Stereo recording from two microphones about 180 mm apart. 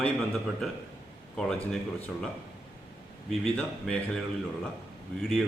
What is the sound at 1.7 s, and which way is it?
Speech, 5° left (ahead or behind).